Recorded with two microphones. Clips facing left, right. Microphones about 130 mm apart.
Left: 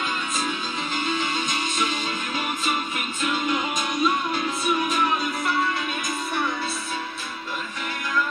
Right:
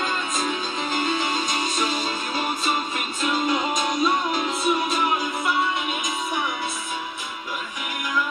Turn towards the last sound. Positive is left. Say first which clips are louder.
# even
turn(degrees=-15)  # may be behind; listen again after turning